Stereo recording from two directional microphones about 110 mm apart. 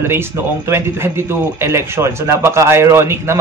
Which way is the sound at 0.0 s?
20° right (ahead or behind).